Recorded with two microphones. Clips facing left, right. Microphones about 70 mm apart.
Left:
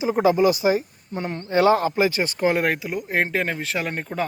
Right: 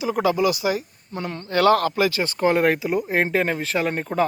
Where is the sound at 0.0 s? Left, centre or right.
Left.